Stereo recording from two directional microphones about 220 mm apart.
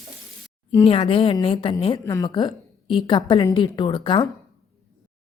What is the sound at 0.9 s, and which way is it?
A woman's voice, 25° left (ahead or behind).